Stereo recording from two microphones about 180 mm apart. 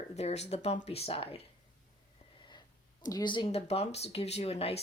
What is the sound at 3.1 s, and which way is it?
Speech, 25° left (ahead or behind).